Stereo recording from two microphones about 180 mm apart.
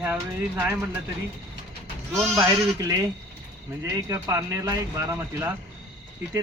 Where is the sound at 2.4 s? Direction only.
20° right (ahead or behind).